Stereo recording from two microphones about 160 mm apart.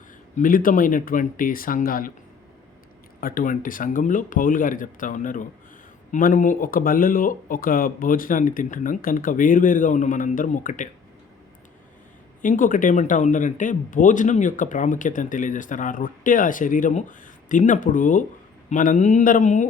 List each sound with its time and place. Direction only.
0.3 s speech: 60° left (ahead or behind)
3.2 s speech: 60° left (ahead or behind)
12.4 s speech: 55° left (ahead or behind)